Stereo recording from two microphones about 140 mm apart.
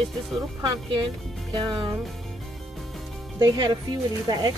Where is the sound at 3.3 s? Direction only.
30° right (ahead or behind).